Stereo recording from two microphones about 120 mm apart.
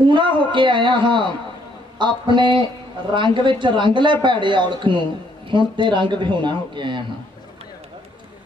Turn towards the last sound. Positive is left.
turn(degrees=-40)  # may be behind; listen again after turning